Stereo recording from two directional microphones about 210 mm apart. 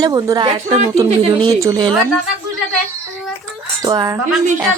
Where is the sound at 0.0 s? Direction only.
15° right (ahead or behind).